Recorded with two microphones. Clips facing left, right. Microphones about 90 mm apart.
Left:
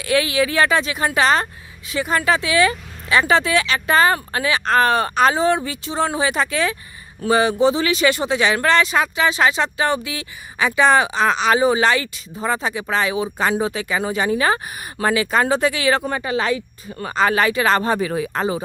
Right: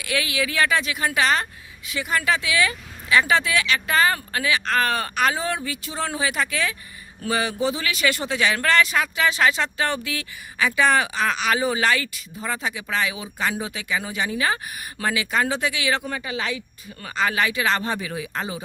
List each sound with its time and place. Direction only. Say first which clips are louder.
0.0 s speech: left 7 dB; 35° left (ahead or behind)